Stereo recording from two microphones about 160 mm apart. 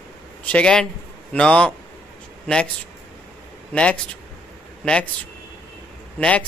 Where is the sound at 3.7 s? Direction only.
5° left (ahead or behind).